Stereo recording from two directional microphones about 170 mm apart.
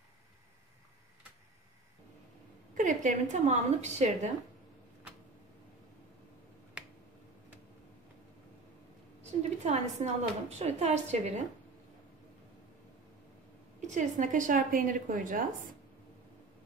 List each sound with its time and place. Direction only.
2.7 s a woman's voice: 45° right (ahead or behind)
9.2 s a woman's voice: 40° right (ahead or behind)
13.7 s a woman's voice: 45° right (ahead or behind)